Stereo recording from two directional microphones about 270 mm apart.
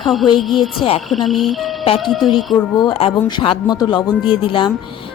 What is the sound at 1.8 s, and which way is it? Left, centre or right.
Speech, left.